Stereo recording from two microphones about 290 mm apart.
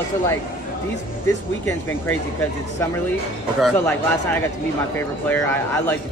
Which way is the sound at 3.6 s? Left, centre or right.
Centre.